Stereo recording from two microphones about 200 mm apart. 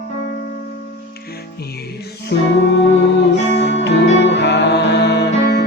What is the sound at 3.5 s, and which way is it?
Music, 65° left (ahead or behind).